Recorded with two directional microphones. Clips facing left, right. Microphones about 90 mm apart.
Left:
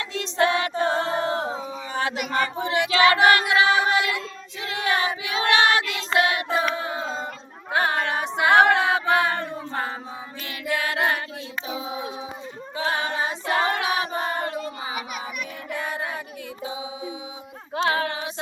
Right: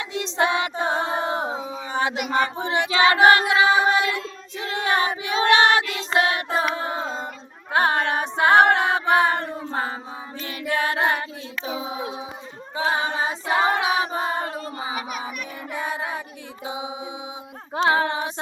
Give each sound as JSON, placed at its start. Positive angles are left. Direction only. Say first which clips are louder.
{"t": 0.1, "sound": "music", "louder": "even", "side_deg": -20}
{"t": 1.7, "sound": "child singing", "louder": "right 2 dB", "side_deg": -25}
{"t": 6.1, "sound": "a sound", "louder": "even", "side_deg": -30}
{"t": 7.7, "sound": "female singing", "louder": "right 3 dB", "side_deg": -30}
{"t": 10.7, "sound": "a sound", "louder": "right 2 dB", "side_deg": -30}
{"t": 11.6, "sound": "child singing", "louder": "right 4 dB", "side_deg": -35}
{"t": 11.9, "sound": "a sound", "louder": "right 1 dB", "side_deg": -25}
{"t": 12.7, "sound": "female singing", "louder": "right 2 dB", "side_deg": -20}
{"t": 13.5, "sound": "choir", "louder": "right 3 dB", "side_deg": -20}
{"t": 15.7, "sound": "child singing", "louder": "right 2 dB", "side_deg": -15}
{"t": 16.6, "sound": "music", "louder": "right 2 dB", "side_deg": -20}
{"t": 17.8, "sound": "a capella", "louder": "right 4 dB", "side_deg": -30}